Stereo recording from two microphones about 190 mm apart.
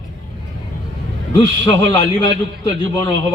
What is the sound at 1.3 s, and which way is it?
A man's voice, 25° left (ahead or behind).